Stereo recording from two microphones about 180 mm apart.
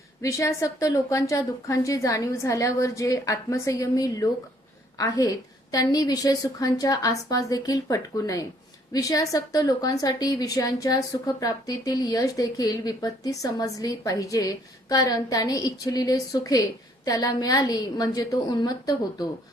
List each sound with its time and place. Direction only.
0.2 s a woman's voice: 15° left (ahead or behind)